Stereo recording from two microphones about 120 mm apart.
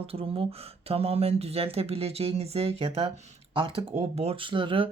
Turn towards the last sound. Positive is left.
turn(degrees=-45)  # may be behind; listen again after turning